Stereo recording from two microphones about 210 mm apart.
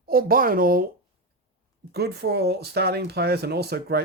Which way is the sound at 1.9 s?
50° right (ahead or behind).